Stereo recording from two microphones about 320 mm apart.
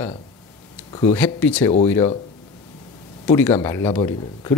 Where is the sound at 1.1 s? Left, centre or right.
Centre.